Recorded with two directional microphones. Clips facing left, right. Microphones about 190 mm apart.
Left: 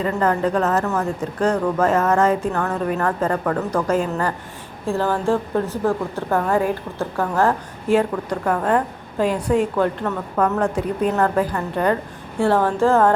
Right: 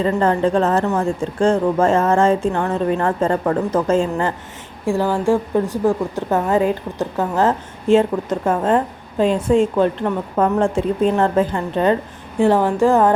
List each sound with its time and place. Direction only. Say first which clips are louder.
0.0 s a woman's voice: right 3 dB; 30° right (ahead or behind)
4.9 s a woman's voice: right 3 dB; 15° right (ahead or behind)